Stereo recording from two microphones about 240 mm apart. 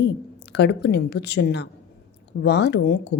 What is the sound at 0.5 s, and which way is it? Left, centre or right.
Speech, left.